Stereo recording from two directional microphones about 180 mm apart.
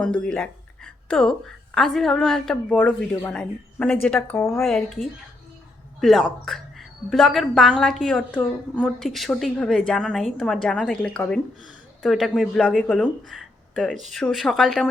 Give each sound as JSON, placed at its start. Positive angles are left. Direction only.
{"t": 0.0, "sound": "a woman's voice", "side_deg": 5}
{"t": 4.6, "sound": "a woman's voice", "side_deg": 0}